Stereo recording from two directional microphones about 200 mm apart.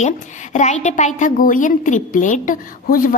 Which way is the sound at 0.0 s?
35° left (ahead or behind).